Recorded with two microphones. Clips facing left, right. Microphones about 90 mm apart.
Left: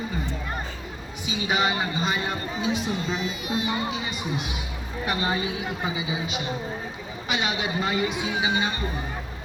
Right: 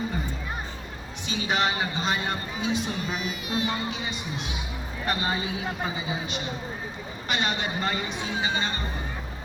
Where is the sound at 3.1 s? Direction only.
20° left (ahead or behind).